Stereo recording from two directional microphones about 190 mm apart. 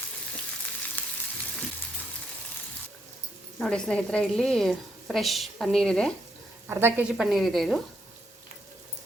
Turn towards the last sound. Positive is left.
turn(degrees=0)  # may be behind; listen again after turning